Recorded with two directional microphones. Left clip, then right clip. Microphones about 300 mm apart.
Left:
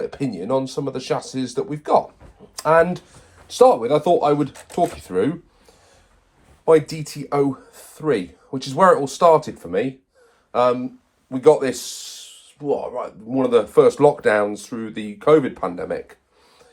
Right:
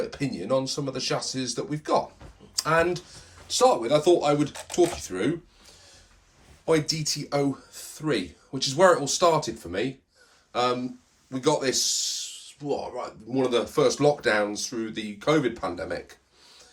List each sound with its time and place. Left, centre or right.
0.0 s speech: centre
3.4 s speech: left
6.7 s speech: centre